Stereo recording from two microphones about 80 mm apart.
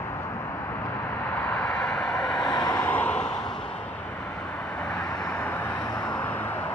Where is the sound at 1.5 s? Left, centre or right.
Centre.